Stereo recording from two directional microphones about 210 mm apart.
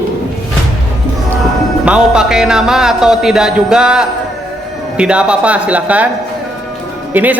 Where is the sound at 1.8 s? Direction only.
5° right (ahead or behind).